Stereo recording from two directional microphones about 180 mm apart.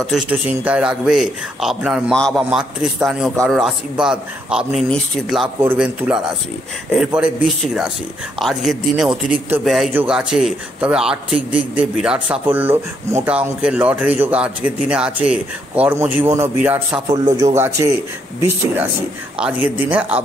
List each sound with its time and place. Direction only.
0.0 s a man's voice: 5° right (ahead or behind)
5.6 s a man's voice: 10° right (ahead or behind)
17.1 s a man's voice: 20° right (ahead or behind)
19.3 s a man's voice: 5° right (ahead or behind)